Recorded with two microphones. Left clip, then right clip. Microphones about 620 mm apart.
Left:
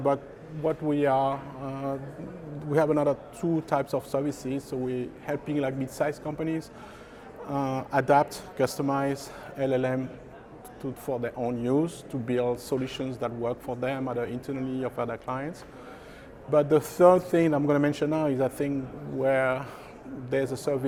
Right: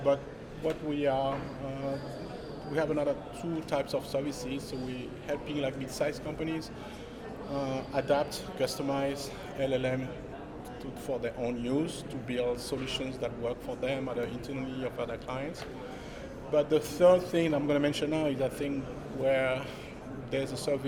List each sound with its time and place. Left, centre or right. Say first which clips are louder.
0.6 s speech: left 5 dB; left
2.7 s speech: left 6 dB; left
7.7 s speech: left 7 dB; left
11.0 s speech: left 3 dB; left
16.5 s speech: left 5 dB; left